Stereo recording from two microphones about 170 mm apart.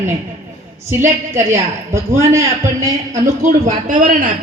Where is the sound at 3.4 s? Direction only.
45° right (ahead or behind).